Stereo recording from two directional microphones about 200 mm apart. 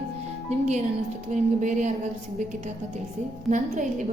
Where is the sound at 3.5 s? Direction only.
40° right (ahead or behind).